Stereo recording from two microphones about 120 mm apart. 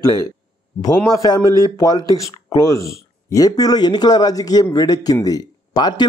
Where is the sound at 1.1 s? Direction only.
30° left (ahead or behind).